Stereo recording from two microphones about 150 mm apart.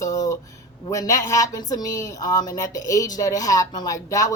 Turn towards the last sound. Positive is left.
turn(degrees=20)  # may be behind; listen again after turning